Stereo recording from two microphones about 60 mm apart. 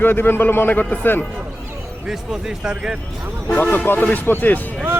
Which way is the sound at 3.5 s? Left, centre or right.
Left.